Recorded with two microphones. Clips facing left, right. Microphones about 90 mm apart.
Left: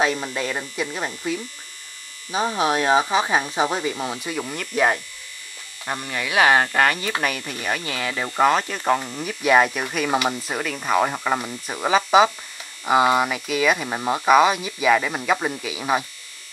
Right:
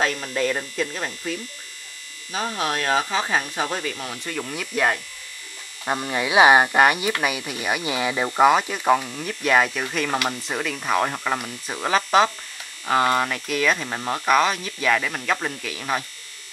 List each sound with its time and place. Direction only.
0.0 s speech: 15° left (ahead or behind)
5.9 s speech: 20° right (ahead or behind); by 16.1 s 15° left (ahead or behind)